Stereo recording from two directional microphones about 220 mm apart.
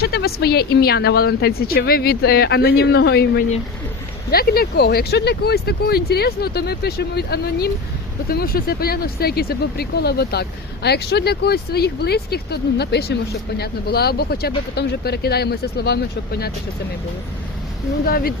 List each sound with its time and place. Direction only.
0.0 s speech: 45° left (ahead or behind)
18.0 s speech: 40° left (ahead or behind)